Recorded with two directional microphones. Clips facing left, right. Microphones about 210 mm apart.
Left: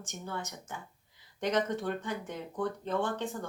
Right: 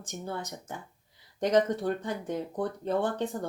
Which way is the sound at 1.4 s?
35° right (ahead or behind).